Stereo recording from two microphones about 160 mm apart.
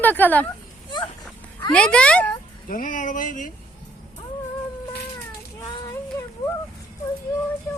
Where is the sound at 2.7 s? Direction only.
55° left (ahead or behind).